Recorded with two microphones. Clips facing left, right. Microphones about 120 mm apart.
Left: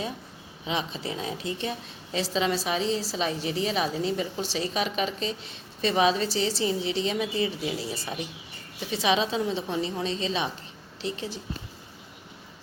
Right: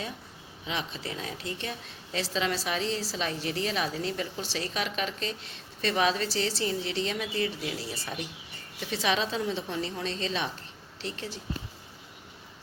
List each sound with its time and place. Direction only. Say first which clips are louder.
0.6 s a woman's voice: left 4 dB; 20° left (ahead or behind)